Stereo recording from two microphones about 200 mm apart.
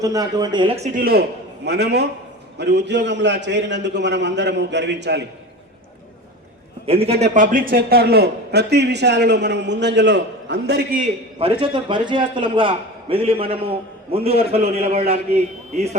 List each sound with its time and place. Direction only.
0.0 s a man's voice: 15° right (ahead or behind)
0.9 s a man's voice: 50° right (ahead or behind)
6.8 s a man's voice: 30° right (ahead or behind); by 10.8 s 60° right (ahead or behind)
10.9 s a man's voice: 35° right (ahead or behind)